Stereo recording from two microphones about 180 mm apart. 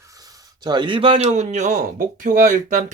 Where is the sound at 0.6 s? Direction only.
25° right (ahead or behind).